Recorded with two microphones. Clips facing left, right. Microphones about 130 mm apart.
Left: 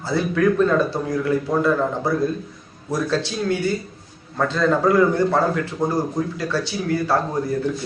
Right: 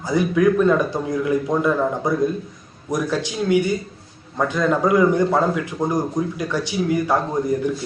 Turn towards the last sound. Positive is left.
turn(degrees=-15)  # may be behind; listen again after turning